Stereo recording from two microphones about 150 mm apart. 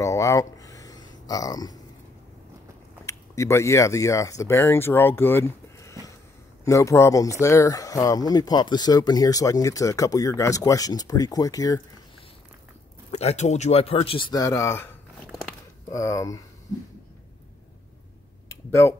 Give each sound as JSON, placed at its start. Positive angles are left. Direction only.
{"t": 0.0, "sound": "a sound", "side_deg": 20}
{"t": 3.1, "sound": "speech", "side_deg": 20}
{"t": 13.1, "sound": "speech", "side_deg": 45}
{"t": 15.9, "sound": "speech", "side_deg": 20}
{"t": 18.5, "sound": "speech", "side_deg": 20}